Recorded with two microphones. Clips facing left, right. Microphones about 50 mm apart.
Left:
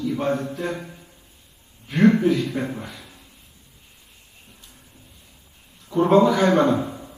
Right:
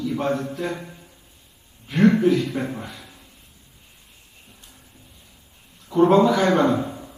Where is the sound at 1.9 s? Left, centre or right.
Left.